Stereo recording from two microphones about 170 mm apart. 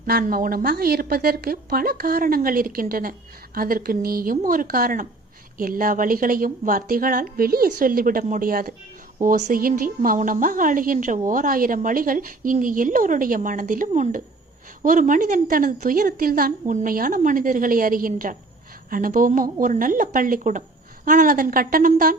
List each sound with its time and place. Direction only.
0.0 s a woman's voice: 55° right (ahead or behind)